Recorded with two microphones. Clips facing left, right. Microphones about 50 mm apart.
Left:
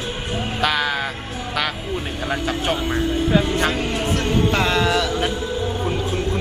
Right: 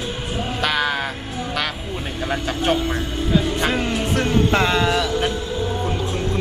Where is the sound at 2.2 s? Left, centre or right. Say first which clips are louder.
Right 2 dB; centre.